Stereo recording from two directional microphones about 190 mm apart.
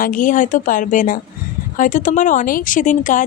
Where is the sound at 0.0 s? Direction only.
45° left (ahead or behind).